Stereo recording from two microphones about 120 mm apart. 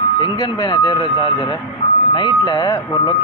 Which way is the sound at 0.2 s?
35° left (ahead or behind).